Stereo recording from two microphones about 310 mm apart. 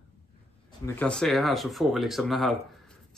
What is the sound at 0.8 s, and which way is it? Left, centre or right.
Speech, centre.